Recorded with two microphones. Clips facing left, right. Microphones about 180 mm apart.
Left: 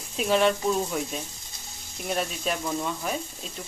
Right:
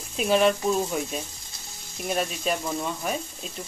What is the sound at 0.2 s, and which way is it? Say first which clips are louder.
Speech: right 1 dB; centre (ahead or behind).